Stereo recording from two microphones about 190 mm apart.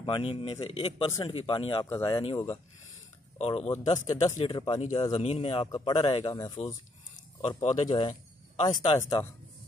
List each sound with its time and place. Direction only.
0.0 s speech: 30° left (ahead or behind)
3.3 s speech: 30° left (ahead or behind)
3.7 s speech: 20° left (ahead or behind)
7.4 s speech: 35° left (ahead or behind)
8.6 s speech: 20° left (ahead or behind)